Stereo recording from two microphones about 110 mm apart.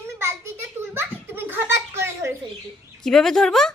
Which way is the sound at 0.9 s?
20° right (ahead or behind).